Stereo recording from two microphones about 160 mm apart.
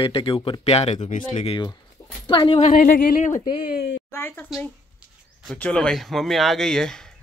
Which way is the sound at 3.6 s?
80° left.